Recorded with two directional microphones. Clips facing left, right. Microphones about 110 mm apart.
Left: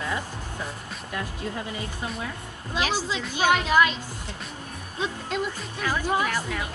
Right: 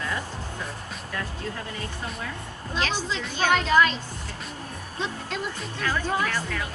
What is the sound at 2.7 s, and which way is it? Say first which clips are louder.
Speech: left 1 dB; 10° left (ahead or behind).